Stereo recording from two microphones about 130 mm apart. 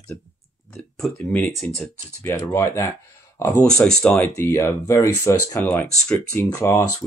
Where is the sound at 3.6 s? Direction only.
5° left (ahead or behind).